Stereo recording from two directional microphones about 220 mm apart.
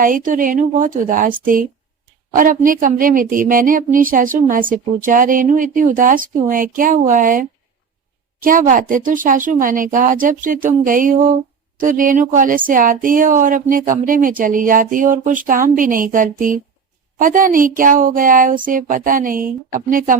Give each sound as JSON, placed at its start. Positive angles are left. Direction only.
{"t": 0.0, "sound": "speech", "side_deg": -40}
{"t": 2.3, "sound": "speech", "side_deg": -40}